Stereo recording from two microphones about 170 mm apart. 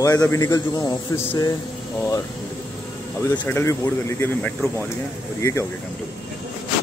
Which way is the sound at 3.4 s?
15° left (ahead or behind).